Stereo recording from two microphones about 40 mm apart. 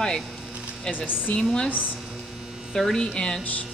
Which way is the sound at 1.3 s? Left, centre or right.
Left.